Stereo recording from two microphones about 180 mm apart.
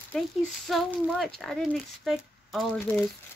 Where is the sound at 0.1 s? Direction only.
5° left (ahead or behind).